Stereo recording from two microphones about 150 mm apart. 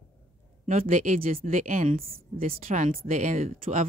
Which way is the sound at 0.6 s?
65° right (ahead or behind).